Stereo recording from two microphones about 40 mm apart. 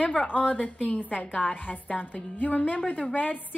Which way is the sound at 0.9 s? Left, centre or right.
Left.